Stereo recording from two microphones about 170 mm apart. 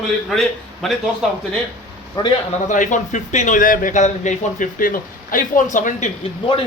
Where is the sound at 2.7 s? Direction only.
45° left (ahead or behind).